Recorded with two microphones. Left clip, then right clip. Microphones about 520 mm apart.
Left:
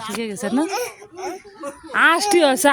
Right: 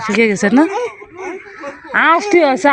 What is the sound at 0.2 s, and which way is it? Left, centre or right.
Speech, left.